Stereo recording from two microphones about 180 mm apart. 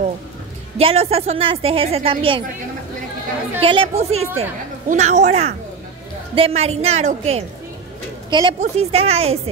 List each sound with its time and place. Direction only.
0.7 s a woman's voice: 35° right (ahead or behind)
3.6 s a woman's voice: 30° right (ahead or behind)
8.3 s a woman's voice: 25° right (ahead or behind)